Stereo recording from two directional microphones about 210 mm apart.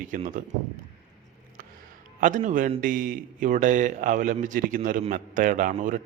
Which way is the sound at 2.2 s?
35° right (ahead or behind).